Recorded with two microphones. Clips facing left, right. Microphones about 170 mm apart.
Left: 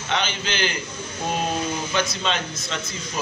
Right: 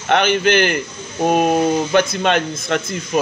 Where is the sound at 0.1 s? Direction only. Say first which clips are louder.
Right 12 dB; 60° right (ahead or behind).